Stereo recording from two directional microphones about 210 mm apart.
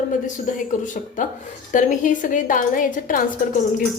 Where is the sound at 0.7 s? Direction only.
40° left (ahead or behind).